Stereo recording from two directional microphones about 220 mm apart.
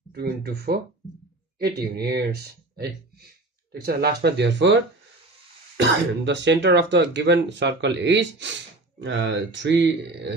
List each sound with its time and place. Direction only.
0.1 s speech: 45° right (ahead or behind)